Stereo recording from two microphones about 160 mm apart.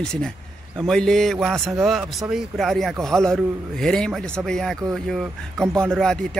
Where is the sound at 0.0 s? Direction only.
5° left (ahead or behind).